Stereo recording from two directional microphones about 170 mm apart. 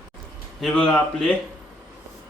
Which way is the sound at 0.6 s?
5° left (ahead or behind).